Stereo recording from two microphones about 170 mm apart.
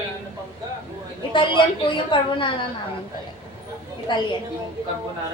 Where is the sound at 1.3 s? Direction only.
30° left (ahead or behind).